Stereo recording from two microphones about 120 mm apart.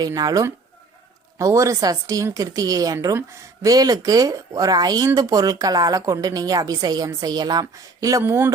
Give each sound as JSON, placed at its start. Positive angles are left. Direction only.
{"t": 0.1, "sound": "a woman's voice", "side_deg": -30}